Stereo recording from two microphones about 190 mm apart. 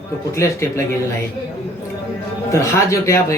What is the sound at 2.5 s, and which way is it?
Speech, 15° left (ahead or behind).